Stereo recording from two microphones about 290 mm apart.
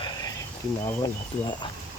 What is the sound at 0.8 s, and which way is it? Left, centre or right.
Speech, centre.